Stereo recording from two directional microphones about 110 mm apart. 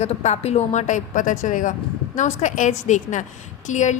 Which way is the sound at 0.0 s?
90° left.